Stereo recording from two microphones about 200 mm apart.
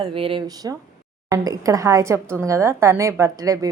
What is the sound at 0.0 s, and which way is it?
A woman's voice, 25° right (ahead or behind).